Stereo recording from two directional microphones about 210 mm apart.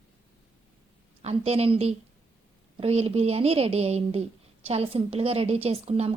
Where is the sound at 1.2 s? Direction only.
30° right (ahead or behind).